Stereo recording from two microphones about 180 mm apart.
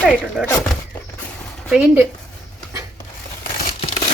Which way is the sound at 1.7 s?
5° right (ahead or behind).